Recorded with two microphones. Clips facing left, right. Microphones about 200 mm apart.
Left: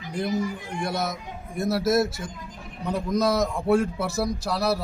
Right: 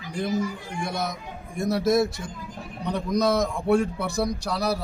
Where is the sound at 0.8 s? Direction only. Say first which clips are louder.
Left 1 dB; centre (ahead or behind).